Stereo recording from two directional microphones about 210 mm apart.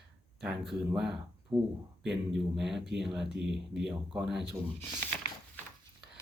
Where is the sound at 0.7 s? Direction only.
Centre (ahead or behind).